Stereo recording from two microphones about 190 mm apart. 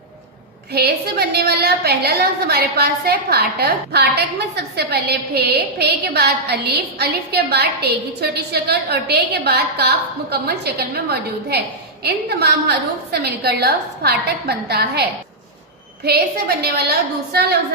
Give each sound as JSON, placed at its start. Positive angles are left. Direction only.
{"t": 0.7, "sound": "a woman's voice", "side_deg": -60}
{"t": 16.0, "sound": "a woman's voice", "side_deg": -55}